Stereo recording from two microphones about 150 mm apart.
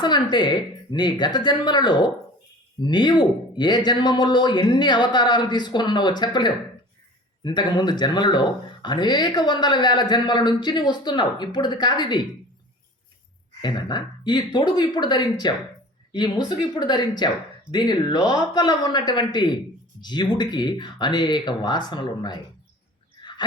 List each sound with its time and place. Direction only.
0.0 s speech: 30° left (ahead or behind)
13.6 s speech: 30° left (ahead or behind)